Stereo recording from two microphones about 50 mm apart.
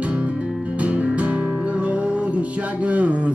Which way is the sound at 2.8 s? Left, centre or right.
Right.